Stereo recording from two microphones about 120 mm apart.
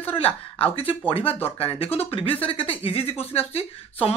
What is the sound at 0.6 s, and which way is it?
Speech, 50° left (ahead or behind).